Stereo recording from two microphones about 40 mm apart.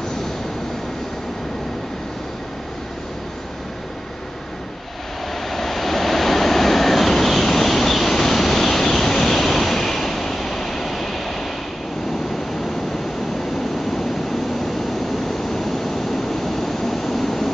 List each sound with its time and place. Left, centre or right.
5.5 s vehicle: centre
15.2 s vehicle: centre